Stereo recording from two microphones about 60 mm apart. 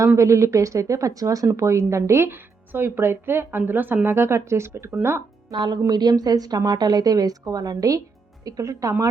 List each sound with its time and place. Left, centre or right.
0.2 s speech: right
1.5 s speech: right
4.0 s speech: right
5.5 s a woman's voice: right